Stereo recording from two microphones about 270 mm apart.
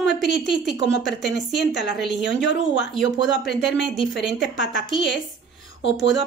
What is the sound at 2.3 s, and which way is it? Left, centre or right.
Speech, left.